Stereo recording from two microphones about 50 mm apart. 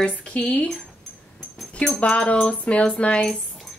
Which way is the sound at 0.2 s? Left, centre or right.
Left.